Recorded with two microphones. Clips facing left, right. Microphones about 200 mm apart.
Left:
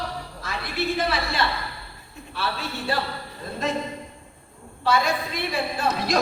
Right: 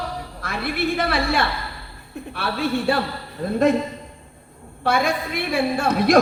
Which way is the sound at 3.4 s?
60° right (ahead or behind).